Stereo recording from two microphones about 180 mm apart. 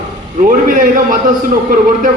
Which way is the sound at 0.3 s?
45° right (ahead or behind).